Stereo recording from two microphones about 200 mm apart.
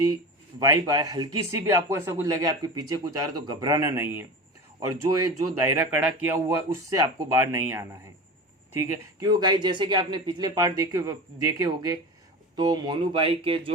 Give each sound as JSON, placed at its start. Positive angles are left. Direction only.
{"t": 0.6, "sound": "speech", "side_deg": -15}
{"t": 9.3, "sound": "speech", "side_deg": -20}